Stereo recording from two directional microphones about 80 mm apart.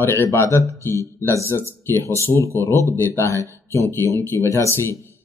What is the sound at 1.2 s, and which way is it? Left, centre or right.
Speech, left.